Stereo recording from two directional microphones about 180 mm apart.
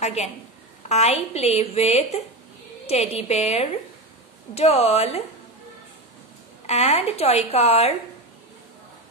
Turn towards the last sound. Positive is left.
turn(degrees=35)  # may be behind; listen again after turning